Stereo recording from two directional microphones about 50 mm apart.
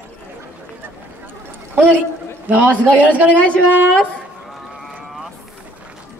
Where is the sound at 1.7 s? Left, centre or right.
Right.